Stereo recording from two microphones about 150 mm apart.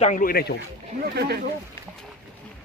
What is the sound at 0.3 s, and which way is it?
Speech, 90° left.